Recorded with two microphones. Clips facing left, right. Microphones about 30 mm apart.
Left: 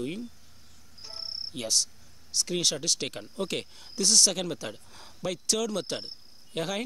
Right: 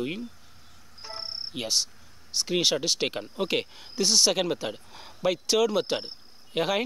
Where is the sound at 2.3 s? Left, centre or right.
Right.